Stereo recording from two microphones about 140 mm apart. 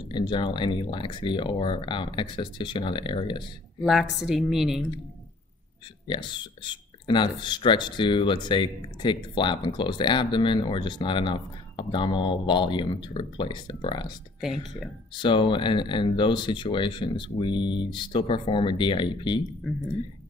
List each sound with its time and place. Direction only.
0.1 s speech: 35° left (ahead or behind)
3.8 s a woman's voice: centre (ahead or behind)
6.0 s speech: 35° left (ahead or behind)
15.1 s speech: 35° left (ahead or behind)
19.6 s a woman's voice: centre (ahead or behind)